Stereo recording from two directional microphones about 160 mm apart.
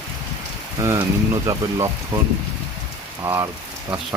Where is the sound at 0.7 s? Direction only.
20° right (ahead or behind).